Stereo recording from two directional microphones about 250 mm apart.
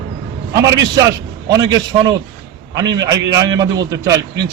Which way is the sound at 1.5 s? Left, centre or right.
Centre.